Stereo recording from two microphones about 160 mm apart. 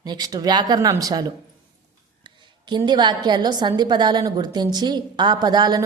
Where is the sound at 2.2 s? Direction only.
30° right (ahead or behind).